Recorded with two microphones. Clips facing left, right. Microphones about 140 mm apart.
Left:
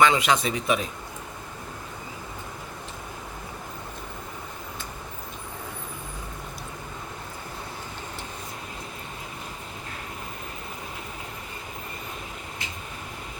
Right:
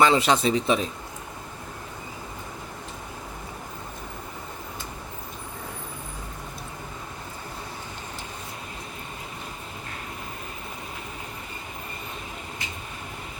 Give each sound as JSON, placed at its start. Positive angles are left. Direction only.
{"t": 0.0, "sound": "speech", "side_deg": -30}